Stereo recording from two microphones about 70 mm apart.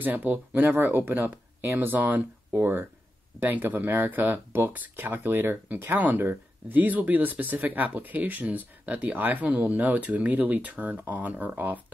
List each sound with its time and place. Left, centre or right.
0.0 s speech: right